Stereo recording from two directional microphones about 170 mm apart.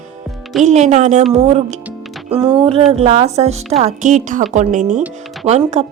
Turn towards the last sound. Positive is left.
turn(degrees=-40)  # may be behind; listen again after turning